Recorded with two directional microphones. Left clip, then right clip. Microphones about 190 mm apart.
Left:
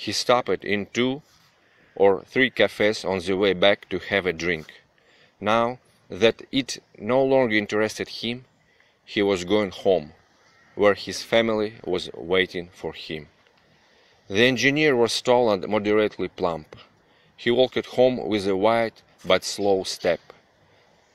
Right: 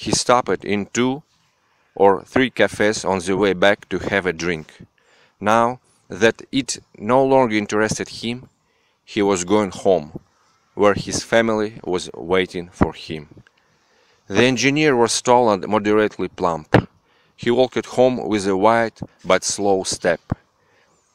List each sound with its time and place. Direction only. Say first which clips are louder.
0.0 s speech: right 4 dB; 40° right (ahead or behind)